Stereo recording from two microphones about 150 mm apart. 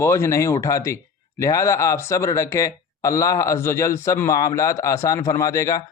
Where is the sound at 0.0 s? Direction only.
20° left (ahead or behind).